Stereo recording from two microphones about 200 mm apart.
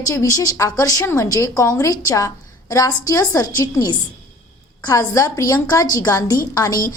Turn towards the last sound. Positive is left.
turn(degrees=15)  # may be behind; listen again after turning